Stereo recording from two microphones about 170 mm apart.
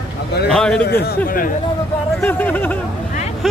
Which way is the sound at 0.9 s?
60° left (ahead or behind).